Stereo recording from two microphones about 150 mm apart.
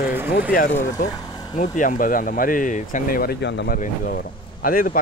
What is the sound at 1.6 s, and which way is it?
Speech, 60° left (ahead or behind).